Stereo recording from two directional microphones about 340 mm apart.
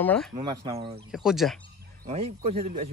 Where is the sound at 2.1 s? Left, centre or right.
Centre.